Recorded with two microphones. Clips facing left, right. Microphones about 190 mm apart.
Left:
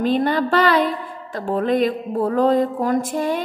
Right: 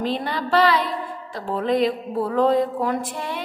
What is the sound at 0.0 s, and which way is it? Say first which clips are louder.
A woman's voice: left 7 dB; 50° left (ahead or behind).